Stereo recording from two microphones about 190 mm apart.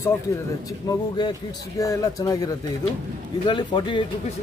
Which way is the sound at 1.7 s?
15° left (ahead or behind).